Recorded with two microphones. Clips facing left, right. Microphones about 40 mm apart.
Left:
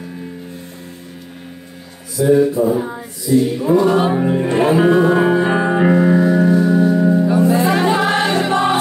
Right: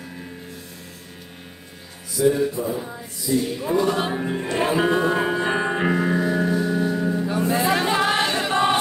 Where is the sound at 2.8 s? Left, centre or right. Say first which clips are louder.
Left 9 dB; left.